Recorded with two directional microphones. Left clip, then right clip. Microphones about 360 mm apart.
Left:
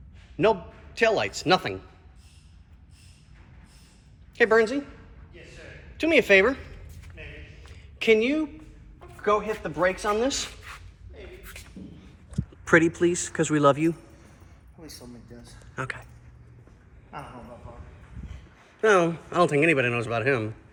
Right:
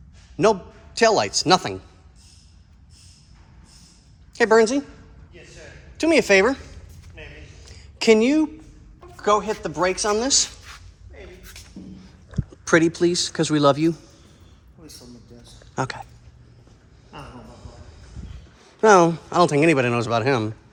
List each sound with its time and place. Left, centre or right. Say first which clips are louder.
0.4 s speech: right 4 dB; centre
4.4 s speech: right 4 dB; centre
6.0 s speech: right 2 dB; centre
7.2 s a sound: right 2 dB; right
7.6 s a sound: right 5 dB; centre
9.2 s speech: right 4 dB; centre
12.6 s speech: right 2 dB; centre
15.7 s speech: right 6 dB; centre
18.8 s speech: right 6 dB; centre